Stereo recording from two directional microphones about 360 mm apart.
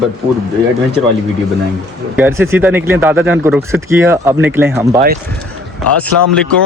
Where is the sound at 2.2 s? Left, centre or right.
Centre.